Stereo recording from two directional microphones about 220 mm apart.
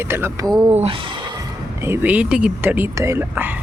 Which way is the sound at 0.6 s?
25° right (ahead or behind).